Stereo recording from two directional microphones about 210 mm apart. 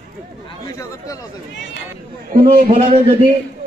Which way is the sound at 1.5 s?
55° left (ahead or behind).